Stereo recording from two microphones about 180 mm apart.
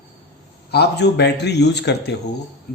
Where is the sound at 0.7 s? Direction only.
65° left (ahead or behind).